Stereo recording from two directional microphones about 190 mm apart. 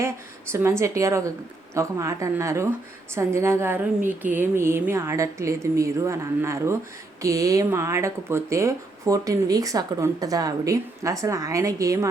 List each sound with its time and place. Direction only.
0.5 s speech: 15° right (ahead or behind)